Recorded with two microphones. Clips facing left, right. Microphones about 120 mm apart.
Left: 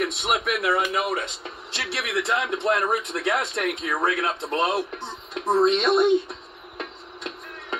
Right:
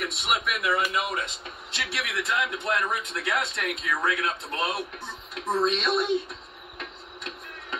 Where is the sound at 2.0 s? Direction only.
30° left (ahead or behind).